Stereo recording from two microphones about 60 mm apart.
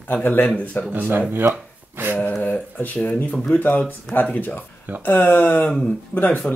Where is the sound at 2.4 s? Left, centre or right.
Left.